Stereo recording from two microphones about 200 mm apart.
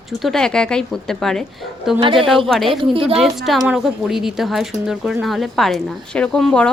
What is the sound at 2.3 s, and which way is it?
Speech, centre (ahead or behind).